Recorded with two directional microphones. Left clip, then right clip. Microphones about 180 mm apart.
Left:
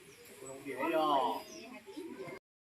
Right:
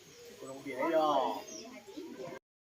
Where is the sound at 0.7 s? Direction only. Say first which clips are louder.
Right 2 dB; 50° right (ahead or behind).